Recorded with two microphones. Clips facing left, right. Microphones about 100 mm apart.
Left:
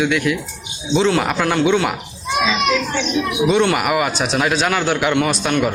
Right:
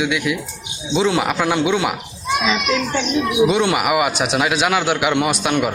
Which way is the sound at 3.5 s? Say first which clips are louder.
Left 1 dB; 10° right (ahead or behind).